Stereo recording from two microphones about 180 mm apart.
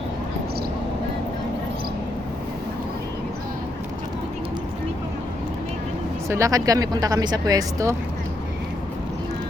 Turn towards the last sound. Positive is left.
turn(degrees=-20)  # may be behind; listen again after turning